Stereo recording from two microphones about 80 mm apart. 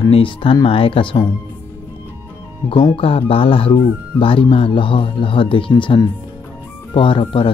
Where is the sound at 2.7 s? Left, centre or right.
Left.